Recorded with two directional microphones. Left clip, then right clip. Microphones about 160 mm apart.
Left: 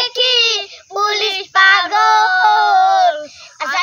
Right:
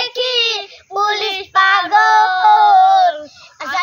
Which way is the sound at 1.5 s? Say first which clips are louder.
Left 1 dB; 25° left (ahead or behind).